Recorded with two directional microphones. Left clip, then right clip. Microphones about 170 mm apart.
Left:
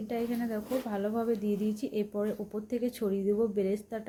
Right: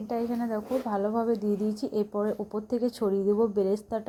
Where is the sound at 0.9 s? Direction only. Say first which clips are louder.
Right 5 dB; 10° right (ahead or behind).